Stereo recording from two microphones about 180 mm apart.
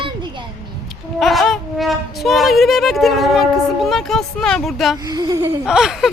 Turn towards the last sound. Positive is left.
turn(degrees=0)  # may be behind; listen again after turning